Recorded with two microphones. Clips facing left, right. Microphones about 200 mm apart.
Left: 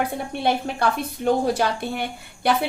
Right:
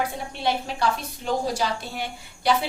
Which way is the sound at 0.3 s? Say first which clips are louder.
Left 3 dB; 55° left (ahead or behind).